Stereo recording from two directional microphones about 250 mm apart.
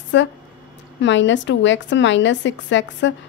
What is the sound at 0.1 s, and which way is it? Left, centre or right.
A woman's voice, left.